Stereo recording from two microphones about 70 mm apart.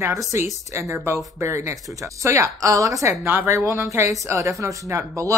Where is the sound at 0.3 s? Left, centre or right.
Right.